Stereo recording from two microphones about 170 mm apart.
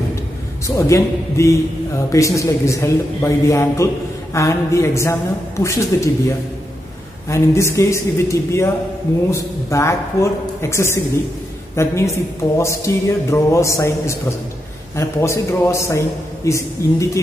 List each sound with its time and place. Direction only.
0.7 s speech: 15° left (ahead or behind)